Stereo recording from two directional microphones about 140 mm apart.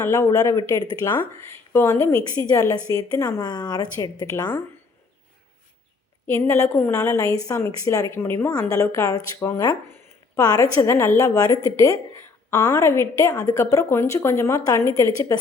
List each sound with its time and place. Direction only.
0.0 s a woman's voice: 20° left (ahead or behind)
6.2 s a woman's voice: 20° left (ahead or behind)